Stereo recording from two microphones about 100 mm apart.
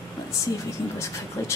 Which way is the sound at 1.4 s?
30° left (ahead or behind).